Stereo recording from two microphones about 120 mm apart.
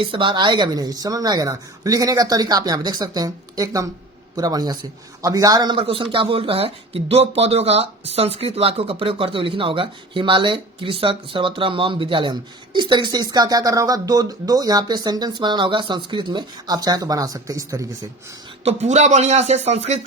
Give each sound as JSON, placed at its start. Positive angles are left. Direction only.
{"t": 0.0, "sound": "a man's voice", "side_deg": -45}
{"t": 18.6, "sound": "speech", "side_deg": -65}